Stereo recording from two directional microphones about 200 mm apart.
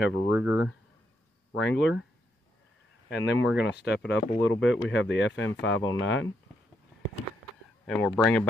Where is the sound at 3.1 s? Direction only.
60° left (ahead or behind).